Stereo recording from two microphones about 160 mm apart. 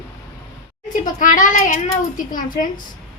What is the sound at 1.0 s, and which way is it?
Speech, 55° left (ahead or behind).